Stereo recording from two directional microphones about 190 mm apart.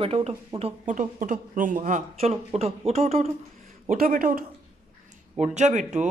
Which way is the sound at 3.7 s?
50° right (ahead or behind).